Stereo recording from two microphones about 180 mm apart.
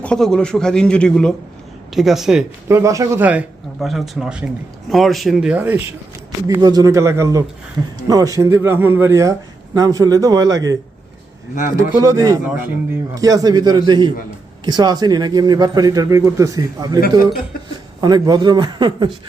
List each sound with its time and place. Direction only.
0.0 s a man's voice: 5° left (ahead or behind)
2.6 s a man's voice: 15° right (ahead or behind)
6.5 s a man's voice: 20° right (ahead or behind)
11.8 s a man's voice: 15° right (ahead or behind)
18.0 s a man's voice: 25° right (ahead or behind)